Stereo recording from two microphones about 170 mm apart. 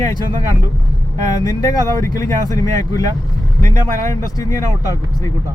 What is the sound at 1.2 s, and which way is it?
Speech, 20° left (ahead or behind).